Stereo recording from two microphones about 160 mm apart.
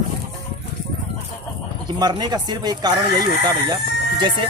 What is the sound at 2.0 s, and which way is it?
A man's voice, 25° right (ahead or behind).